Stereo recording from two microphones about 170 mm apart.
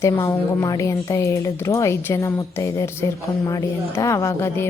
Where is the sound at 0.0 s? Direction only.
20° left (ahead or behind).